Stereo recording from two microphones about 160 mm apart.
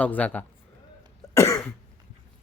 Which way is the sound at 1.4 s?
15° left (ahead or behind).